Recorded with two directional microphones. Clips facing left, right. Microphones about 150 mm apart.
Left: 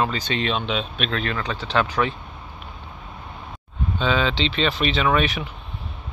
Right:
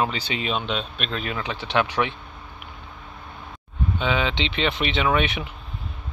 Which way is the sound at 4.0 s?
15° right (ahead or behind).